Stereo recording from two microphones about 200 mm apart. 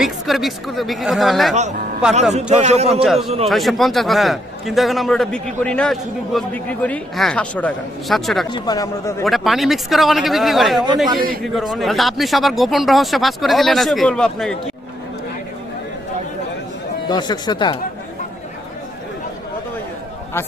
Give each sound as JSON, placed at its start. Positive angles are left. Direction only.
{"t": 0.0, "sound": "a man's voice", "side_deg": 0}
{"t": 2.5, "sound": "a man's voice", "side_deg": -35}
{"t": 3.0, "sound": "a man's voice", "side_deg": 0}
{"t": 3.2, "sound": "a man's voice", "side_deg": -30}
{"t": 3.5, "sound": "a man's voice", "side_deg": 0}
{"t": 8.5, "sound": "a man's voice", "side_deg": 20}
{"t": 9.2, "sound": "a man's voice", "side_deg": 0}
{"t": 17.1, "sound": "speech", "side_deg": 20}